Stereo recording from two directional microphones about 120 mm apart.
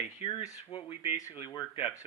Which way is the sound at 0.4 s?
35° left (ahead or behind).